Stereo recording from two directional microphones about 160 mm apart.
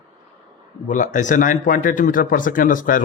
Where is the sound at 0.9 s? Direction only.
50° left (ahead or behind).